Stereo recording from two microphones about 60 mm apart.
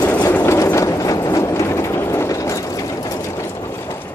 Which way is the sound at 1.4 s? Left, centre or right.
Left.